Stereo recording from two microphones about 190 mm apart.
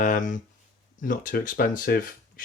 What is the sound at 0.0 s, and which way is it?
Speech, 45° left (ahead or behind).